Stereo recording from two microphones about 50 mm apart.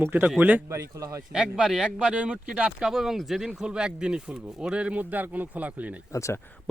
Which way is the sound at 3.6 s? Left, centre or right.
Centre.